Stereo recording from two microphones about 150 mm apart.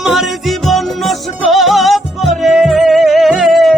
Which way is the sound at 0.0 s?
Centre (ahead or behind).